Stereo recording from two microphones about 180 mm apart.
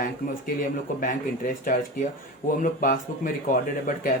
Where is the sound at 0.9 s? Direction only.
50° left (ahead or behind).